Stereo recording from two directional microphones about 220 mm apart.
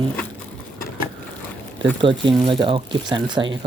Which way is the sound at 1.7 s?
20° right (ahead or behind).